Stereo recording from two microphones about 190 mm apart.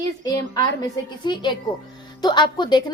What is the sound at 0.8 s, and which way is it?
A woman's voice, 25° left (ahead or behind).